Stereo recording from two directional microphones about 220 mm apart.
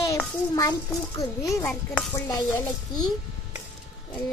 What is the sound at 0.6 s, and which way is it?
Speech, 15° left (ahead or behind).